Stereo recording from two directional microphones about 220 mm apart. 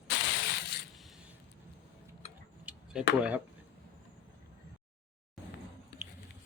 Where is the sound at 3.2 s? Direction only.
5° right (ahead or behind).